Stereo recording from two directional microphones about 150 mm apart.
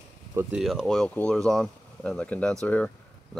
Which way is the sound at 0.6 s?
Centre (ahead or behind).